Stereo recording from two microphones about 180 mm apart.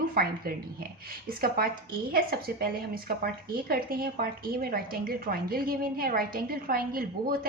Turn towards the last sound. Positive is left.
turn(degrees=-55)  # may be behind; listen again after turning